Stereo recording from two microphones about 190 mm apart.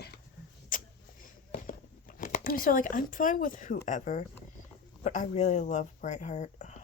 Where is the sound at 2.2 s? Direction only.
45° left (ahead or behind).